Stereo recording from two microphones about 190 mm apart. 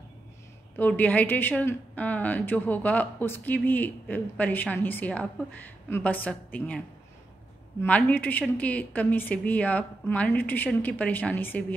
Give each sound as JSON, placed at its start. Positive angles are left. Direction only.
{"t": 0.7, "sound": "speech", "side_deg": 10}
{"t": 7.8, "sound": "speech", "side_deg": 10}